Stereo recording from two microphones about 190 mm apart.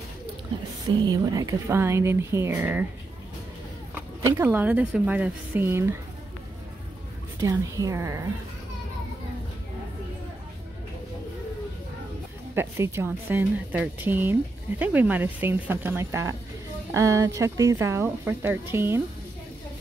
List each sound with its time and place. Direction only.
1.0 s a woman's voice: 20° right (ahead or behind)
4.4 s a woman's voice: 10° right (ahead or behind)
7.4 s a woman's voice: 15° right (ahead or behind)
12.5 s a woman's voice: 15° right (ahead or behind)